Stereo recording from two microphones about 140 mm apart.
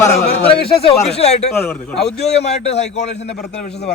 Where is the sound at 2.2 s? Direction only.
50° left (ahead or behind).